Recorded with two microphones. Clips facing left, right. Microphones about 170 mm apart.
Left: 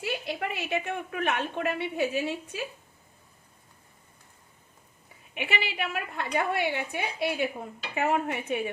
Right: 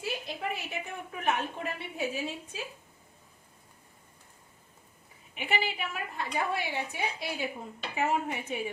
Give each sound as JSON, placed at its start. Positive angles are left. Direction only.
{"t": 0.0, "sound": "a woman's voice", "side_deg": 75}
{"t": 5.3, "sound": "a woman's voice", "side_deg": 70}